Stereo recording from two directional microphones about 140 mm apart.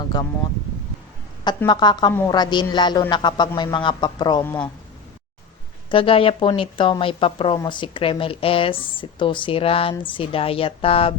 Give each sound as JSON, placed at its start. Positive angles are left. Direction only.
{"t": 0.1, "sound": "speech", "side_deg": 30}
{"t": 1.5, "sound": "speech", "side_deg": 30}
{"t": 5.9, "sound": "speech", "side_deg": 40}